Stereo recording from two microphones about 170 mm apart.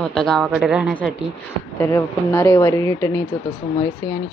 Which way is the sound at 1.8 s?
15° left (ahead or behind).